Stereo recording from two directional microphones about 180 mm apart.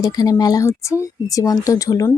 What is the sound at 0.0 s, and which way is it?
A woman's voice, 20° left (ahead or behind).